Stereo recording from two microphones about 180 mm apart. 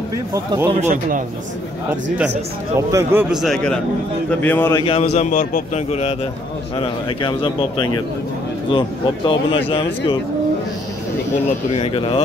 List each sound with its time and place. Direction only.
0.3 s speech: 20° right (ahead or behind)
0.7 s a man's voice: 45° right (ahead or behind)
2.9 s a man's voice: 15° right (ahead or behind); by 4.7 s 10° left (ahead or behind)
4.7 s a man's voice: 30° left (ahead or behind); by 5.6 s 50° left (ahead or behind)
5.9 s a man's voice: 35° left (ahead or behind)
11.7 s speech: 30° left (ahead or behind)